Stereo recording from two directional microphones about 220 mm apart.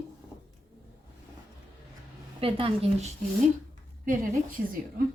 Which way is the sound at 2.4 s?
25° right (ahead or behind).